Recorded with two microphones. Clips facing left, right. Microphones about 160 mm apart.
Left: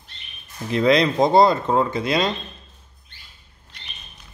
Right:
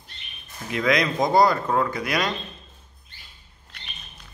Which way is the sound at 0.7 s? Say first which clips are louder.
Left 5 dB; 30° left (ahead or behind).